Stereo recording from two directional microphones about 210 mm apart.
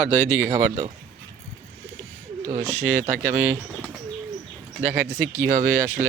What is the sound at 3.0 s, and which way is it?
Speech, 35° right (ahead or behind).